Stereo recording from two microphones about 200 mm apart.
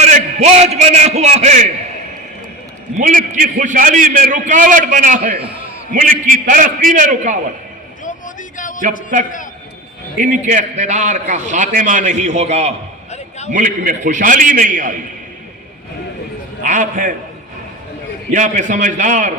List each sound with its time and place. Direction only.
0.0 s a man's voice: 35° right (ahead or behind)
3.0 s a man's voice: 45° right (ahead or behind)
8.5 s a sound: 40° left (ahead or behind)
9.1 s a man's voice: 40° right (ahead or behind)
16.6 s a man's voice: 40° right (ahead or behind)
18.3 s a man's voice: 40° right (ahead or behind)